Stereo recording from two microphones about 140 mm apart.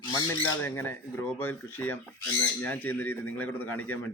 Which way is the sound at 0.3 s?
15° left (ahead or behind).